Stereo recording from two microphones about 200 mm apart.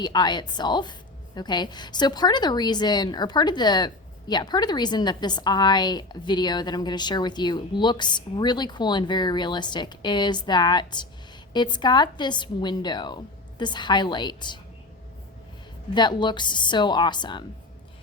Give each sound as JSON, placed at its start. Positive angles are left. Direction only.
{"t": 0.0, "sound": "a woman's voice", "side_deg": 20}
{"t": 16.0, "sound": "a woman's voice", "side_deg": 20}